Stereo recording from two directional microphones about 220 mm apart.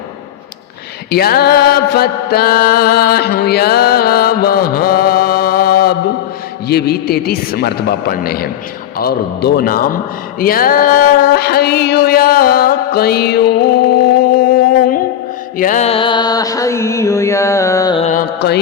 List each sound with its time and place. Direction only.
1.1 s mantra: 45° left (ahead or behind)
10.4 s a sound: 40° left (ahead or behind)
15.5 s music: 35° left (ahead or behind); by 18.0 s 15° left (ahead or behind)
18.0 s music: 35° left (ahead or behind)
18.3 s mantra: 50° left (ahead or behind)